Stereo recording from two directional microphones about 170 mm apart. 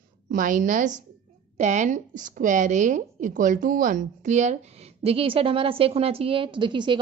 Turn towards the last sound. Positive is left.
turn(degrees=-30)  # may be behind; listen again after turning